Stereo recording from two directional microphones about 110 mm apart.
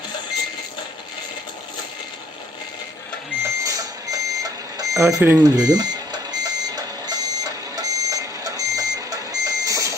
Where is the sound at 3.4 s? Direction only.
30° right (ahead or behind).